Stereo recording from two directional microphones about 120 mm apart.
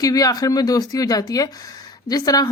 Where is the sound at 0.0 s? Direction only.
30° left (ahead or behind).